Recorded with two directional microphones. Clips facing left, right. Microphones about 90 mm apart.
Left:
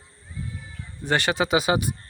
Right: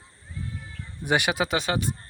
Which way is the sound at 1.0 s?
10° right (ahead or behind).